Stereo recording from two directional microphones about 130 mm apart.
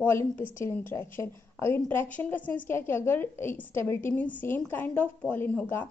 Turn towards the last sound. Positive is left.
turn(degrees=10)  # may be behind; listen again after turning